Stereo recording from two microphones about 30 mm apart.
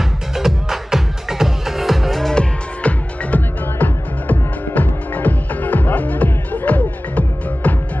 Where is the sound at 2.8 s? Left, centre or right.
Left.